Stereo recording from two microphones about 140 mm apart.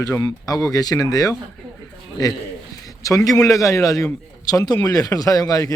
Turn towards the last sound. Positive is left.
turn(degrees=25)  # may be behind; listen again after turning